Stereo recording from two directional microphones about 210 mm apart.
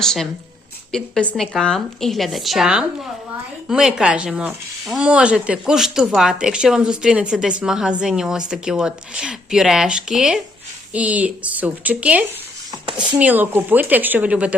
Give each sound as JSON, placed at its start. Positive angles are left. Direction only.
{"t": 0.0, "sound": "speech", "side_deg": 0}
{"t": 12.7, "sound": "a sound", "side_deg": -20}
{"t": 13.1, "sound": "speech", "side_deg": -10}